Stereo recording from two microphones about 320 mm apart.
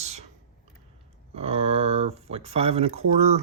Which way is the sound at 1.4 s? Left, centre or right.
Centre.